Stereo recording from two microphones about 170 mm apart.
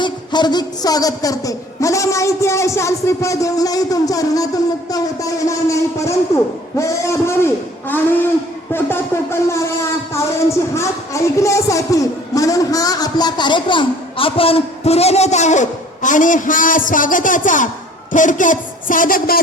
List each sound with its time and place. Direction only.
0.0 s a woman's voice: 25° left (ahead or behind)
10.8 s a woman's voice: 20° left (ahead or behind); by 19.4 s 55° left (ahead or behind)